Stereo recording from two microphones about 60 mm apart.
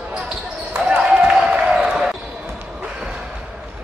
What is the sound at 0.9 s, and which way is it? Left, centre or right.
Basketball bounce, centre.